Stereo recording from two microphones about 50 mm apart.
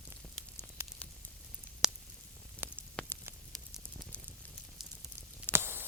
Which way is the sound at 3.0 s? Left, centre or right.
Left.